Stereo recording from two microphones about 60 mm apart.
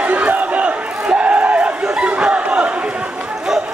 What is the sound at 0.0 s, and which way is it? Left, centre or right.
Crowd, right.